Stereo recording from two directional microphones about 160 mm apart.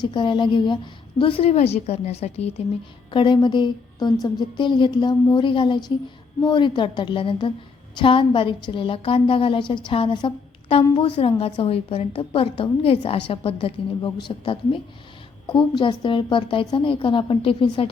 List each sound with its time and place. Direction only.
0.0 s a woman's voice: 30° left (ahead or behind)